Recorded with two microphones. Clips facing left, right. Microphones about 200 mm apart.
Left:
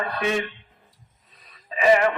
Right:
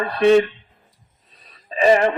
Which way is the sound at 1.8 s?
30° right (ahead or behind).